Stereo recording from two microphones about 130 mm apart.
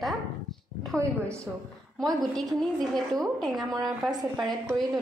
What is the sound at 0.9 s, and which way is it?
A woman's voice, 5° left (ahead or behind).